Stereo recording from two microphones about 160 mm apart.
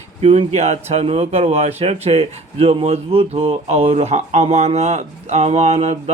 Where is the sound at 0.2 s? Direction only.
40° right (ahead or behind).